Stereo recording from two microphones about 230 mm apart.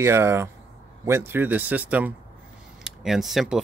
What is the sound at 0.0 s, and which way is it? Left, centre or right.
Speech, centre.